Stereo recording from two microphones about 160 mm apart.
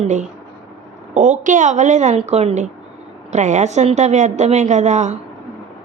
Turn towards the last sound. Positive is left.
turn(degrees=-45)  # may be behind; listen again after turning